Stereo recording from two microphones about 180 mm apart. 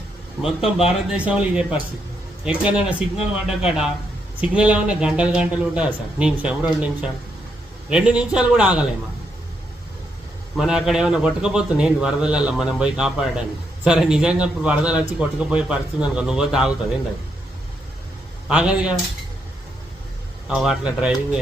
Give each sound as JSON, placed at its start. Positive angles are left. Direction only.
{"t": 0.4, "sound": "a man's voice", "side_deg": 0}
{"t": 10.6, "sound": "a man's voice", "side_deg": 0}
{"t": 18.4, "sound": "a man's voice", "side_deg": -5}
{"t": 20.5, "sound": "a man's voice", "side_deg": -5}